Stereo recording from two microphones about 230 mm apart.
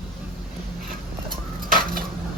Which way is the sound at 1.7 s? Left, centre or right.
Right.